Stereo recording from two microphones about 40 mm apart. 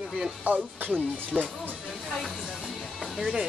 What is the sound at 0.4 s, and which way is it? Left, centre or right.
Speech, right.